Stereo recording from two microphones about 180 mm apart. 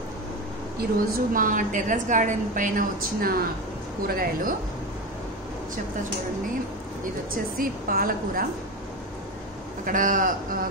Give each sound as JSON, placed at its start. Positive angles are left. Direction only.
{"t": 0.7, "sound": "a woman's voice", "side_deg": -55}
{"t": 7.5, "sound": "a woman's voice", "side_deg": -50}
{"t": 9.8, "sound": "a woman's voice", "side_deg": -50}